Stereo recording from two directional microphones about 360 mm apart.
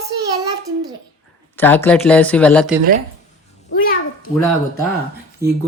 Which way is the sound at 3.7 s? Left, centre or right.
Left.